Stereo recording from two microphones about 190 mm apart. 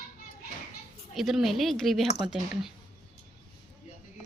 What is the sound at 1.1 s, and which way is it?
Speech, centre (ahead or behind).